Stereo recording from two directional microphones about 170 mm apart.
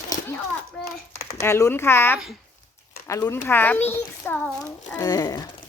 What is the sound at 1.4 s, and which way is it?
A woman's voice, 15° left (ahead or behind).